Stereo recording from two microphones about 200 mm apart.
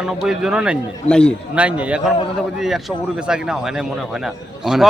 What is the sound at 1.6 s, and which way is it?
A man's voice, 5° right (ahead or behind).